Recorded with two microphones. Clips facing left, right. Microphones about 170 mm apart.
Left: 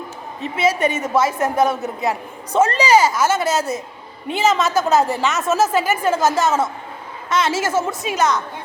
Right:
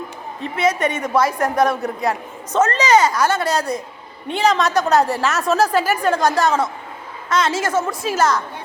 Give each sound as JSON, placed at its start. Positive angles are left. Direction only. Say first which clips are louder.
{"t": 0.5, "sound": "a woman's voice", "louder": "left 1 dB", "side_deg": 30}
{"t": 1.8, "sound": "a woman's voice", "louder": "right 1 dB", "side_deg": 5}
{"t": 7.3, "sound": "a woman's voice", "louder": "even", "side_deg": 25}
{"t": 8.0, "sound": "a woman's voice", "louder": "right 3 dB", "side_deg": 0}